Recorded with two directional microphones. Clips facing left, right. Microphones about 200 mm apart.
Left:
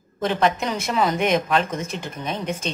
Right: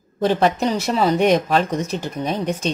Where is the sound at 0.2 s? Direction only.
35° right (ahead or behind).